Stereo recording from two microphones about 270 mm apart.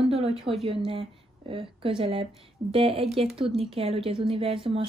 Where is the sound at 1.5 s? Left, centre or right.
Centre.